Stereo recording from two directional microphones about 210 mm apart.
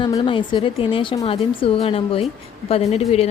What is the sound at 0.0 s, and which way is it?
A woman's voice, 25° left (ahead or behind).